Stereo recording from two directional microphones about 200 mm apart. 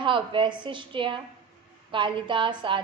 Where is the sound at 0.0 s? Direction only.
25° right (ahead or behind).